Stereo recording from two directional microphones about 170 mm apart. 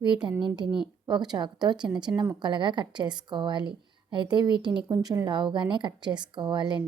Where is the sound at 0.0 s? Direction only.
25° right (ahead or behind).